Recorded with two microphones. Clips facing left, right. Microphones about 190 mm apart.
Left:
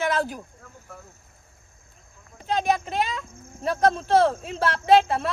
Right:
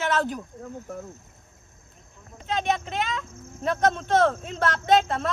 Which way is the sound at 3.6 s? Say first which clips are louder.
Left 2 dB; 35° left (ahead or behind).